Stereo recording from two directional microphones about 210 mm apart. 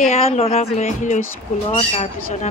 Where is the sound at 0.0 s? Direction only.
30° left (ahead or behind).